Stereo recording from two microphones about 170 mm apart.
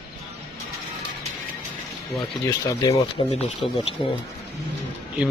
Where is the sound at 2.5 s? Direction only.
20° left (ahead or behind).